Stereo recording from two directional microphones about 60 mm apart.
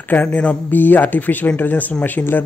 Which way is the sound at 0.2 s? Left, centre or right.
Centre.